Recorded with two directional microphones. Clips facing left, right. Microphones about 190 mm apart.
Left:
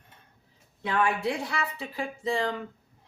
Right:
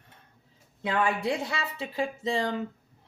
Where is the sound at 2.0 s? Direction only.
25° right (ahead or behind).